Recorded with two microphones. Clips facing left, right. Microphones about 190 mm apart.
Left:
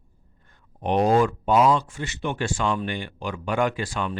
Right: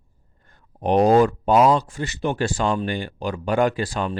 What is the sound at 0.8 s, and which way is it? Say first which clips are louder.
Speech: right 4 dB; 40° right (ahead or behind).